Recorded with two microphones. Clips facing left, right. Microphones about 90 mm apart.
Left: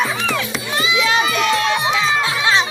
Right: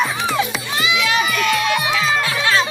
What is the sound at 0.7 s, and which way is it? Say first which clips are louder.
Music: left 1 dB; 30° left (ahead or behind).